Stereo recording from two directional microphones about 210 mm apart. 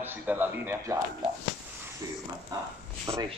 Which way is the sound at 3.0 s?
25° right (ahead or behind).